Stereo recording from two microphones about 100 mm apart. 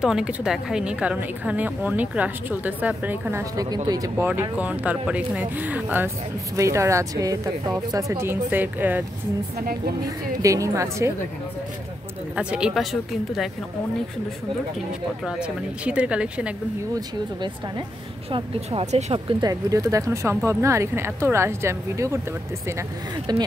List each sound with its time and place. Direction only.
0.0 s a woman's voice: 10° right (ahead or behind)
3.5 s a woman's voice: 40° right (ahead or behind)
4.4 s a woman's voice: 15° right (ahead or behind)
6.5 s a woman's voice: 30° right (ahead or behind)
10.0 s a woman's voice: 35° right (ahead or behind)
12.4 s a woman's voice: 10° right (ahead or behind)
15.2 s a woman's voice: 10° right (ahead or behind)
16.9 s speech: 45° right (ahead or behind)
18.3 s speech: 75° right (ahead or behind)
19.4 s speech: 35° right (ahead or behind)
23.3 s speech: 45° right (ahead or behind)